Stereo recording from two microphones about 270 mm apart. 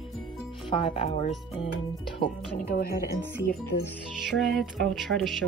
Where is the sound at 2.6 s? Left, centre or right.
Left.